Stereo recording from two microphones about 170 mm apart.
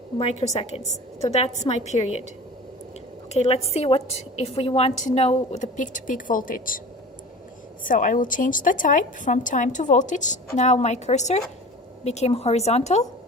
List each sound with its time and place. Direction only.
0.2 s a woman's voice: 40° left (ahead or behind)
3.3 s a woman's voice: 40° left (ahead or behind); by 6.8 s 55° left (ahead or behind)
7.9 s a woman's voice: 50° left (ahead or behind)